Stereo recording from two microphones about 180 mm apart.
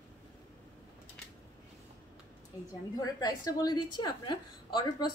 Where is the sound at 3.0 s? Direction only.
20° left (ahead or behind).